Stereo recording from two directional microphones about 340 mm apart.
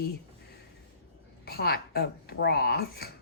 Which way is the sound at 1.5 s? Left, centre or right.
Left.